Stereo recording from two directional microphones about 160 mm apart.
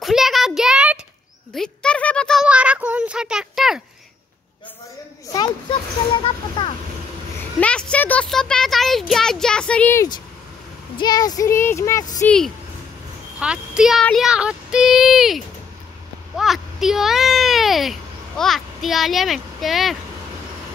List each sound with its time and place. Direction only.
0.0 s a sound: centre (ahead or behind)
1.5 s a child's voice: 5° left (ahead or behind)
2.4 s speech: 5° right (ahead or behind)
5.3 s speech: 25° left (ahead or behind)
7.6 s speech: 10° left (ahead or behind)
11.0 s speech: 25° left (ahead or behind)
12.3 s a child's voice: 5° left (ahead or behind)